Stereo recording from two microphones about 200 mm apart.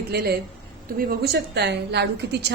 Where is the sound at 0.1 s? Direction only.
50° right (ahead or behind).